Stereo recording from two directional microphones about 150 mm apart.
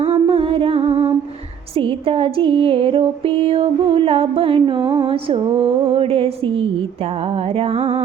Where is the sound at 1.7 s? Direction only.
35° right (ahead or behind).